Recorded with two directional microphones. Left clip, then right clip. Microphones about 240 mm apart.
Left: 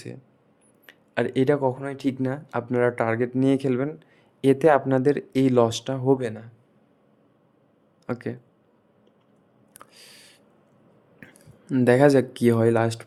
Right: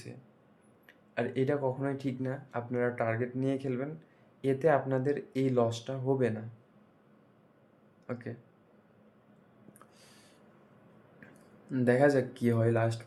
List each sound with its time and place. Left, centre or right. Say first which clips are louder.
0.9 s speech: left 8 dB; left
8.0 s speech: left 9 dB; left
9.7 s a sound: left 13 dB; left
11.2 s speech: left 7 dB; left